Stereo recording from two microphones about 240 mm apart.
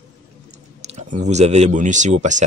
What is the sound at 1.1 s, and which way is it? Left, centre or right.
Speech, right.